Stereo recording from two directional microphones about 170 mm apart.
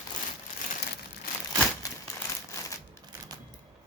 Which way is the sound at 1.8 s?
20° left (ahead or behind).